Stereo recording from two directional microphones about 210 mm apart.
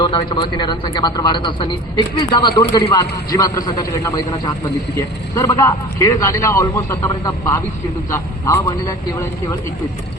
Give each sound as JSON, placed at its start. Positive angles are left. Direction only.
{"t": 0.0, "sound": "a man's voice", "side_deg": 25}